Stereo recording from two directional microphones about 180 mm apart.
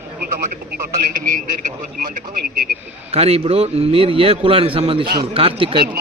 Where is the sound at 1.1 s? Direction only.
45° right (ahead or behind).